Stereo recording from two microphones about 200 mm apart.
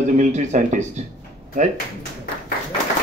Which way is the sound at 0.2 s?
35° right (ahead or behind).